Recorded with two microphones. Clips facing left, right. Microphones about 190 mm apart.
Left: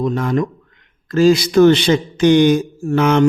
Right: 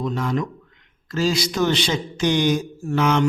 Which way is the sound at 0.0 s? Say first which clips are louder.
Left 6 dB; 55° left (ahead or behind).